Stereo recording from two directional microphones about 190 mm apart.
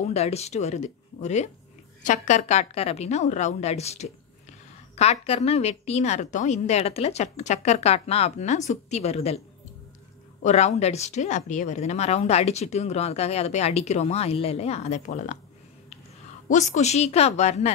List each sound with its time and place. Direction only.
0.0 s speech: 35° left (ahead or behind)
10.4 s speech: 35° left (ahead or behind)
16.4 s speech: 40° left (ahead or behind)